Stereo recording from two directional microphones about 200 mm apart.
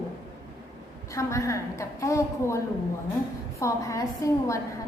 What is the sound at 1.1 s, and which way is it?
A woman's voice, 15° left (ahead or behind).